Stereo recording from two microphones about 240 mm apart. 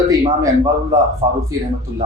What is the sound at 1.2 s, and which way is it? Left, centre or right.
Speech, centre.